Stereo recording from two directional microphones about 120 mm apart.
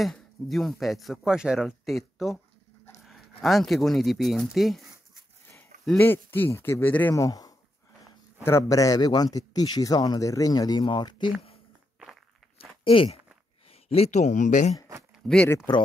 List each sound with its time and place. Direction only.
0.0 s speech: centre (ahead or behind)
3.4 s speech: centre (ahead or behind)
5.9 s speech: 20° left (ahead or behind)
7.2 s speech: 30° left (ahead or behind)
12.8 s speech: 50° left (ahead or behind); by 14.8 s 90° left
15.2 s speech: 10° left (ahead or behind)